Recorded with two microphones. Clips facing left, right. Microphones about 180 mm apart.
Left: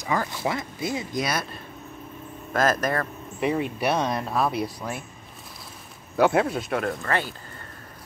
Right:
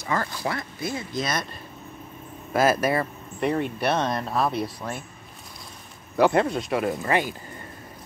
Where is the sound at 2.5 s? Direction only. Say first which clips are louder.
Right 2 dB; 10° right (ahead or behind).